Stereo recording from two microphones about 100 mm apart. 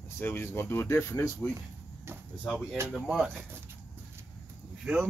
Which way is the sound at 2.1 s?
25° right (ahead or behind).